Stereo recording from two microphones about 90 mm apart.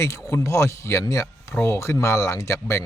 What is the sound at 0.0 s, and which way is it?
Speech, 35° left (ahead or behind).